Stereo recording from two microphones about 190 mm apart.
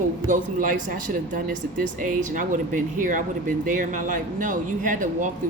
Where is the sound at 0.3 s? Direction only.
45° right (ahead or behind).